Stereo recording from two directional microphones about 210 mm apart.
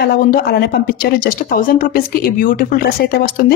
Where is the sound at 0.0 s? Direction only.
45° left (ahead or behind).